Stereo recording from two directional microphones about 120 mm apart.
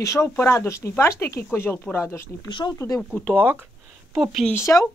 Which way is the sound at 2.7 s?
25° left (ahead or behind).